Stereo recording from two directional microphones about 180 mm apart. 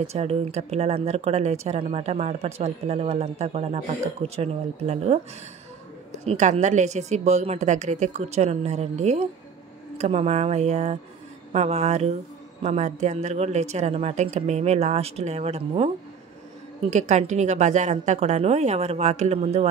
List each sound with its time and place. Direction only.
0.0 s speech: 35° right (ahead or behind)
6.2 s speech: 40° right (ahead or behind)
16.9 s speech: 40° right (ahead or behind)